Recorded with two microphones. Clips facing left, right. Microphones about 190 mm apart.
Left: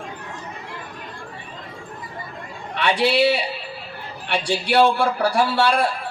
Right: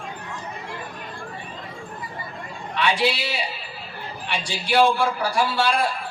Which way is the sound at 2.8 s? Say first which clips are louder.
Left 6 dB; 60° left (ahead or behind).